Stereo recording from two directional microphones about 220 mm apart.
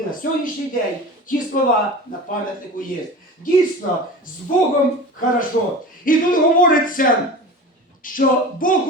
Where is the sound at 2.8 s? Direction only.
40° left (ahead or behind).